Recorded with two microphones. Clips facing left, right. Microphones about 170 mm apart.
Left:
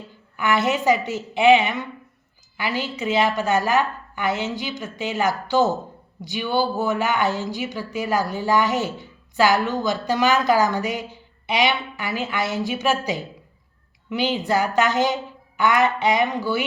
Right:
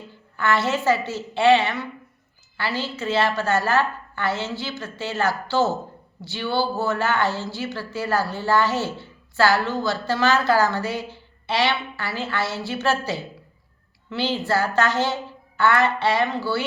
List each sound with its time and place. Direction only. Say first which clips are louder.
0.3 s a woman's voice: left 1 dB; 15° left (ahead or behind)